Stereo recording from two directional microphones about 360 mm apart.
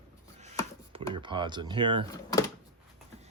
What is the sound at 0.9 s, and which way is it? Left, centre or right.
Speech, centre.